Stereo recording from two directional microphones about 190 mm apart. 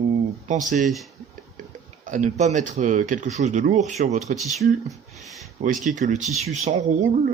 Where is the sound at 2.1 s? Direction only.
40° right (ahead or behind).